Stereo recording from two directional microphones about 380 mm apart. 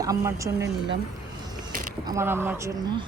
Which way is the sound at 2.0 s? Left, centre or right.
Centre.